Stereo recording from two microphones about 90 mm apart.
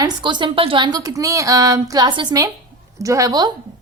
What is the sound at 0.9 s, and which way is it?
A woman's voice, 40° right (ahead or behind).